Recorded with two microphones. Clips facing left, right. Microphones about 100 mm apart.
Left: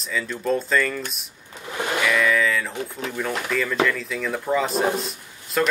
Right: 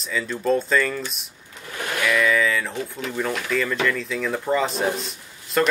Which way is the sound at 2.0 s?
Centre (ahead or behind).